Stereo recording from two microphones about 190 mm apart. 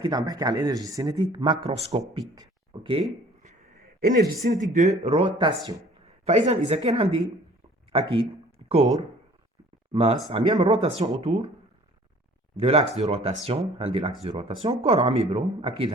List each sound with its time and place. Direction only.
0.0 s speech: 20° right (ahead or behind)
2.3 s a sound: 25° right (ahead or behind); by 4.1 s 40° right (ahead or behind)
4.4 s speech: 40° right (ahead or behind); by 5.8 s 20° right (ahead or behind)
6.1 s speech: 35° right (ahead or behind)
12.5 s speech: 30° right (ahead or behind)